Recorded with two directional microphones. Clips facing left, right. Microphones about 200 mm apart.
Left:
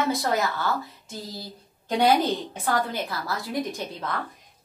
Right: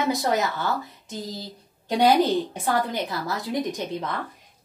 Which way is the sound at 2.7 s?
20° right (ahead or behind).